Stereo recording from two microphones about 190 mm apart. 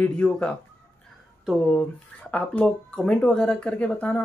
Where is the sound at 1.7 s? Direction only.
5° left (ahead or behind).